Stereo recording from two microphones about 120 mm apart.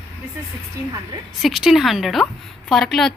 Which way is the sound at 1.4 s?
5° right (ahead or behind).